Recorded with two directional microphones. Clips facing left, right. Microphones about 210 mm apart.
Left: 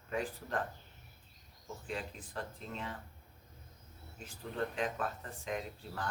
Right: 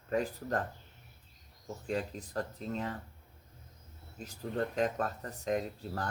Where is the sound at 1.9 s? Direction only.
40° right (ahead or behind).